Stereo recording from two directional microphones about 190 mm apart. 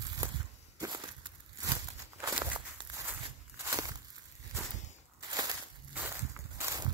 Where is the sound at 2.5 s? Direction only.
25° right (ahead or behind).